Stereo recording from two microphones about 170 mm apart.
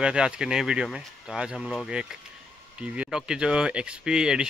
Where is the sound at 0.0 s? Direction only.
5° right (ahead or behind).